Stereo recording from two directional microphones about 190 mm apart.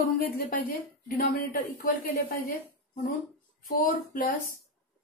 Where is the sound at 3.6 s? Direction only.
45° left (ahead or behind).